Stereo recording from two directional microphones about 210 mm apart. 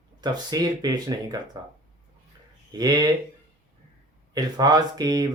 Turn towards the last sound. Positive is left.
turn(degrees=-20)  # may be behind; listen again after turning